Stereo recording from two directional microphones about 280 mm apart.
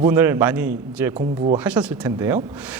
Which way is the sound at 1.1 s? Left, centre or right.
Right.